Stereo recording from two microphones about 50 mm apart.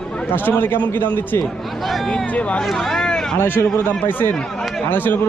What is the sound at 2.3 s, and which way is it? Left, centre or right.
Speech, left.